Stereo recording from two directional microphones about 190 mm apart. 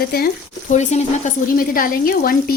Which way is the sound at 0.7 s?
40° left (ahead or behind).